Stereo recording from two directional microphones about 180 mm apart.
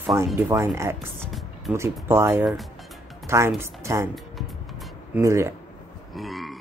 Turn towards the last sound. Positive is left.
turn(degrees=0)  # may be behind; listen again after turning